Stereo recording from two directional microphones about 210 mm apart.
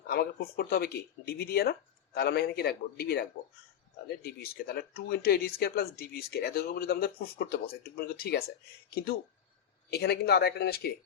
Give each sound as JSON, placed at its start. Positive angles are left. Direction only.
{"t": 0.1, "sound": "speech", "side_deg": 45}
{"t": 9.9, "sound": "speech", "side_deg": 50}